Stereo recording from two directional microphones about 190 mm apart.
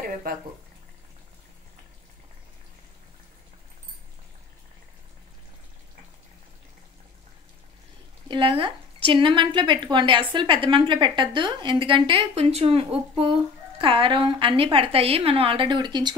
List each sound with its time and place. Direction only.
0.3 s speech: 50° right (ahead or behind)
8.3 s a woman's voice: 25° right (ahead or behind)